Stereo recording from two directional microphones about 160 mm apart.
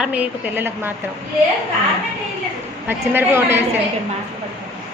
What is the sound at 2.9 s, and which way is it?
Speech, 15° right (ahead or behind).